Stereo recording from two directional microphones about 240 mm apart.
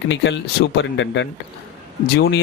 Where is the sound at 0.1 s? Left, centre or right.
Left.